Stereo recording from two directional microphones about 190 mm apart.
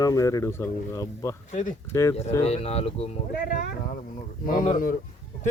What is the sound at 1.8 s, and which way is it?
Speech, 15° left (ahead or behind).